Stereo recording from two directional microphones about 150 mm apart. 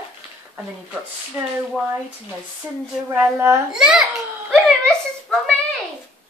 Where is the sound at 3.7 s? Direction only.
5° right (ahead or behind).